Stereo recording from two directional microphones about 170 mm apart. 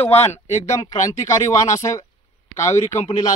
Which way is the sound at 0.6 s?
20° left (ahead or behind).